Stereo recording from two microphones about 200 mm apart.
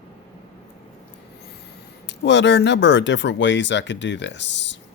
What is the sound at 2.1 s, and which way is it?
Speech, 60° left (ahead or behind).